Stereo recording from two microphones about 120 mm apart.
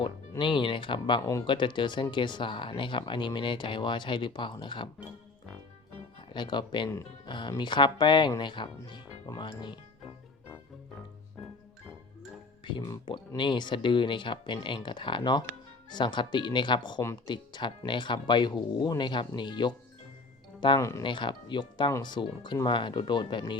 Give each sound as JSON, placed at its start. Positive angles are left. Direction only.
{"t": 0.0, "sound": "speech", "side_deg": 40}
{"t": 1.2, "sound": "speech", "side_deg": 25}
{"t": 1.5, "sound": "speech", "side_deg": 40}
{"t": 6.1, "sound": "speech", "side_deg": 40}
{"t": 12.6, "sound": "speech", "side_deg": 40}
{"t": 20.7, "sound": "speech", "side_deg": 25}
{"t": 21.0, "sound": "speech", "side_deg": 40}